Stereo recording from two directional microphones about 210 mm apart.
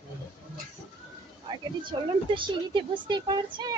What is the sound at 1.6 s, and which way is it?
Speech, 25° right (ahead or behind).